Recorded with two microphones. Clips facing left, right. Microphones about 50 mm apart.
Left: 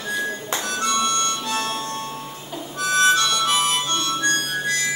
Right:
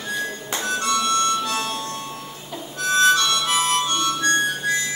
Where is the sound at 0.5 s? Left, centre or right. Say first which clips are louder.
Right 1 dB; centre.